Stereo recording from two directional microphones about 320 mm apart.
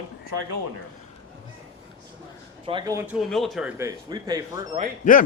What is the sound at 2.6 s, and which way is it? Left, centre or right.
Speech, centre.